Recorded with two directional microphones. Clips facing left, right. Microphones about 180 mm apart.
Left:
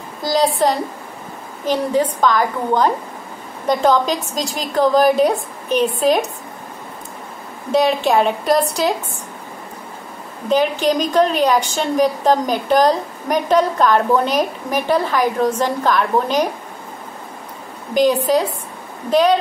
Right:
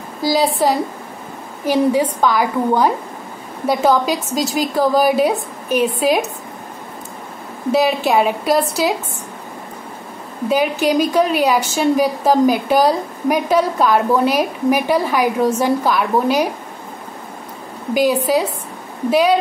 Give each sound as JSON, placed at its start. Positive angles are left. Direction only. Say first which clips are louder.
{"t": 0.2, "sound": "a woman's voice", "louder": "even", "side_deg": -5}
{"t": 7.7, "sound": "a woman's voice", "louder": "even", "side_deg": -5}
{"t": 10.5, "sound": "a woman's voice", "louder": "even", "side_deg": -10}
{"t": 17.9, "sound": "a woman's voice", "louder": "left 1 dB", "side_deg": -5}